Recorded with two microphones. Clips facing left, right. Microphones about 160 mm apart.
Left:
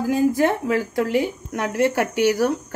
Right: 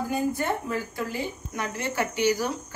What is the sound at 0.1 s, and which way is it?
Speech, 90° left.